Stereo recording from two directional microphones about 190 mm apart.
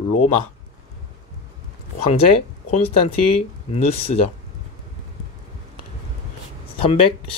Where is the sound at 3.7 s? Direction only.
30° left (ahead or behind).